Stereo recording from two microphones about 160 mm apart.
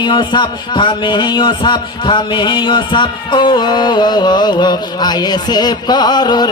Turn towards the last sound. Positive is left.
turn(degrees=25)  # may be behind; listen again after turning